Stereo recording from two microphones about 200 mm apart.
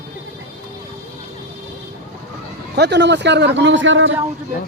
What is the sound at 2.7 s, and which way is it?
A man's voice, 55° right (ahead or behind).